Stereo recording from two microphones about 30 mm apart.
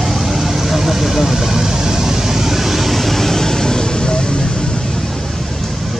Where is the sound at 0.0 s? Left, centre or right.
Centre.